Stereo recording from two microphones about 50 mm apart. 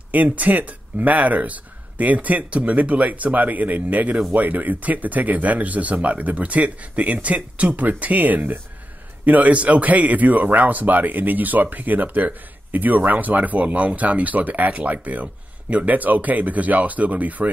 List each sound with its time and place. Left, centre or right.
0.1 s a man's voice: right